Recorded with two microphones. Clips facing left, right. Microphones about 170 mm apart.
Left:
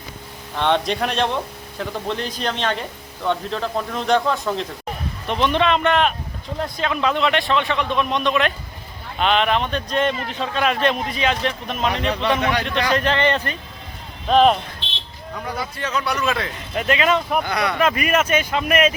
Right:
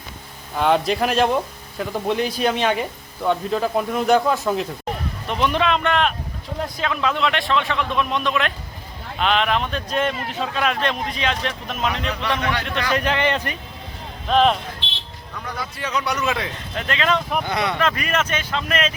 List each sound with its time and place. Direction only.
0.5 s speech: 5° right (ahead or behind)
12.4 s speech: 15° left (ahead or behind)
12.6 s speech: 5° right (ahead or behind)
14.3 s speech: 5° left (ahead or behind)
15.8 s speech: 15° right (ahead or behind)
16.7 s speech: 10° left (ahead or behind)
17.4 s speech: 25° right (ahead or behind)
17.7 s speech: 10° left (ahead or behind)